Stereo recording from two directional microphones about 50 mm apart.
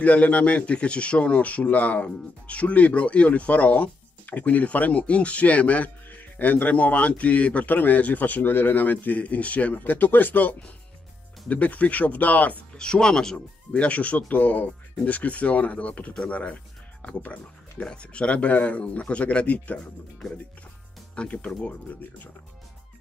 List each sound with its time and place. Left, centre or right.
0.0 s a man's voice: left
12.7 s speech: centre
13.7 s a man's voice: left
21.1 s speech: left